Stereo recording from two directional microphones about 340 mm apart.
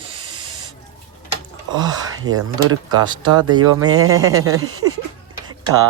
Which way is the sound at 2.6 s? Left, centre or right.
Right.